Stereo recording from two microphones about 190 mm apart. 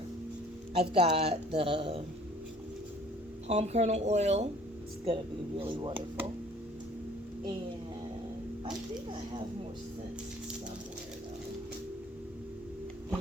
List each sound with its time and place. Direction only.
0.7 s a man's voice: 30° right (ahead or behind)
3.4 s a man's voice: 35° right (ahead or behind)